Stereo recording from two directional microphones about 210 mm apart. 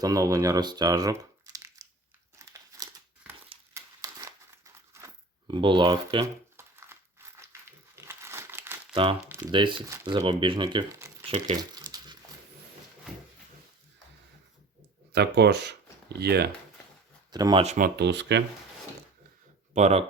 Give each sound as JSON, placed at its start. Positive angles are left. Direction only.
{"t": 0.0, "sound": "speech", "side_deg": -15}
{"t": 2.4, "sound": "crumpling", "side_deg": -15}
{"t": 3.8, "sound": "tearing", "side_deg": -15}
{"t": 6.6, "sound": "crumpling", "side_deg": -10}
{"t": 8.9, "sound": "speech", "side_deg": -25}
{"t": 11.5, "sound": "crumpling", "side_deg": -20}
{"t": 15.1, "sound": "speech", "side_deg": -50}
{"t": 17.3, "sound": "speech", "side_deg": -20}
{"t": 19.7, "sound": "speech", "side_deg": -30}